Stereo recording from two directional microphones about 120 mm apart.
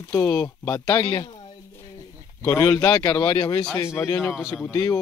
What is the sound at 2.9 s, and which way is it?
Speech, 35° left (ahead or behind).